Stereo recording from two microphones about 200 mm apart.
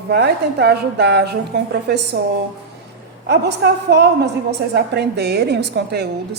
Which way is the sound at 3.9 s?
55° right (ahead or behind).